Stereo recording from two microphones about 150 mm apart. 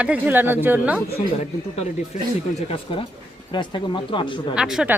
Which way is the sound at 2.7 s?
35° left (ahead or behind).